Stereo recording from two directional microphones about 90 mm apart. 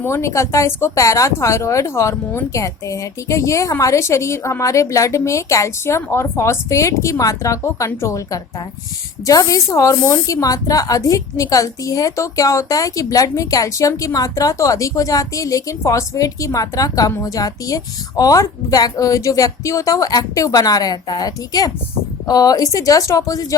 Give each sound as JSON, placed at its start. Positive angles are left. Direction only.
{"t": 0.0, "sound": "speech", "side_deg": 30}